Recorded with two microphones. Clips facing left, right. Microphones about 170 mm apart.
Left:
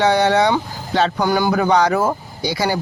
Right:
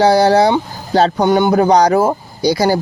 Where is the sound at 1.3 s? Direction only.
25° right (ahead or behind).